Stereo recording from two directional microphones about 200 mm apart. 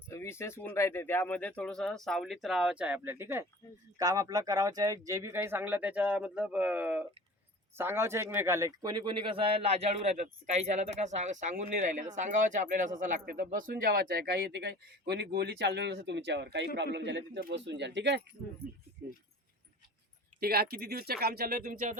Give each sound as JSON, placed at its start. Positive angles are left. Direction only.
{"t": 0.1, "sound": "a man's voice", "side_deg": 15}
{"t": 20.4, "sound": "speech", "side_deg": -50}